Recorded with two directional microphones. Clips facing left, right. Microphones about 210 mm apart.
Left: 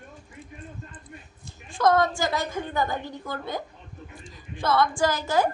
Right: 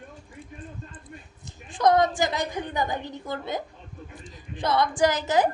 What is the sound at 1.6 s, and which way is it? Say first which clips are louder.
A woman's voice: right 1 dB; 20° right (ahead or behind).